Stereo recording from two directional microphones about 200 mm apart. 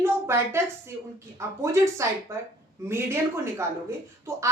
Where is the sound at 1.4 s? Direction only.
15° right (ahead or behind).